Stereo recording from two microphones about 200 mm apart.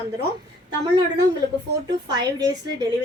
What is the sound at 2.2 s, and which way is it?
Speech, 20° right (ahead or behind).